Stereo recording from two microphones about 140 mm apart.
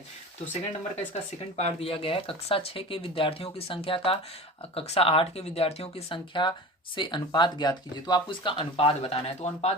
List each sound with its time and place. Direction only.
1.1 s speech: 45° left (ahead or behind)